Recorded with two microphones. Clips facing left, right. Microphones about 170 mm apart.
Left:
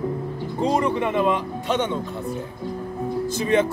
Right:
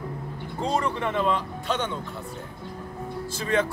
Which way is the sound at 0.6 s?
15° left (ahead or behind).